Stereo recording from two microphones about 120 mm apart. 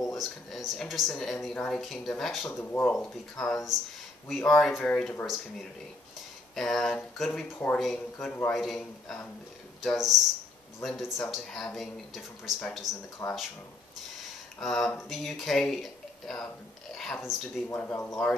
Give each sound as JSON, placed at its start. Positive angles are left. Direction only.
{"t": 0.0, "sound": "speech", "side_deg": 0}
{"t": 2.5, "sound": "speech", "side_deg": 15}
{"t": 2.9, "sound": "speech", "side_deg": 5}
{"t": 5.2, "sound": "speech", "side_deg": -5}
{"t": 13.2, "sound": "speech", "side_deg": 15}
{"t": 14.6, "sound": "speech", "side_deg": 5}
{"t": 16.9, "sound": "a sound", "side_deg": 5}
{"t": 17.7, "sound": "speech", "side_deg": 15}